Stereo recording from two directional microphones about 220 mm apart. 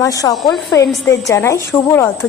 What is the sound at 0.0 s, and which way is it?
A woman's voice, 15° left (ahead or behind).